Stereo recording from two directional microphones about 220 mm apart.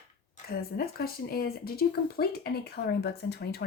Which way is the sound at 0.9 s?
45° left (ahead or behind).